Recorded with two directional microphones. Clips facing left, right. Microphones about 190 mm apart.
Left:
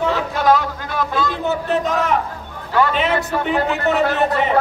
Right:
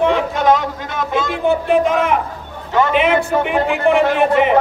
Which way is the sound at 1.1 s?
20° right (ahead or behind).